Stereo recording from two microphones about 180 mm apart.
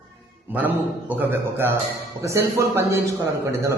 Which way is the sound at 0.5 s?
10° right (ahead or behind).